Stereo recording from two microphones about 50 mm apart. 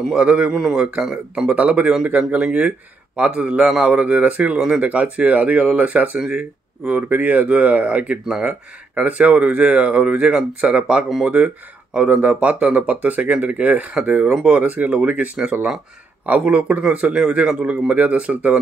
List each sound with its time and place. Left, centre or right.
0.0 s speech: centre
1.5 s speech: right
4.0 s speech: right
4.6 s speech: centre
4.8 s speech: right